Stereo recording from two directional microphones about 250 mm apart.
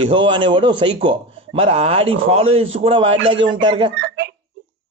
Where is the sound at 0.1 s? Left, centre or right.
Centre.